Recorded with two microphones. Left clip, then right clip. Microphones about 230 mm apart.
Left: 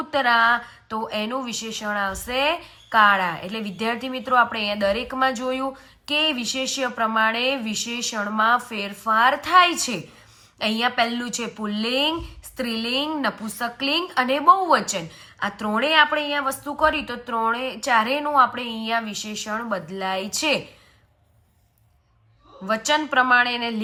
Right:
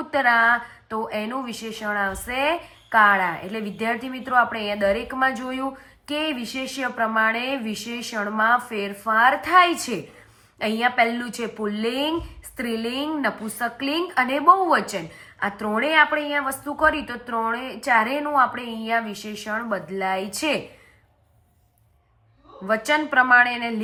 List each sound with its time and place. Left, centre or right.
0.1 s a woman's voice: centre
22.6 s a woman's voice: centre